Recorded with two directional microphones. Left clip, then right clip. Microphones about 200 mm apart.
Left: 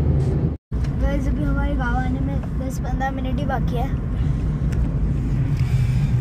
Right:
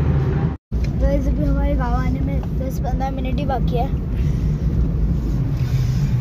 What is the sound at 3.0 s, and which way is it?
Speech, 5° left (ahead or behind).